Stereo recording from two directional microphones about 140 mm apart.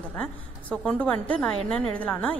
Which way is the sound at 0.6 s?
10° left (ahead or behind).